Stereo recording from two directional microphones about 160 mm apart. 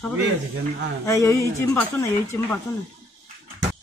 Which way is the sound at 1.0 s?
20° left (ahead or behind).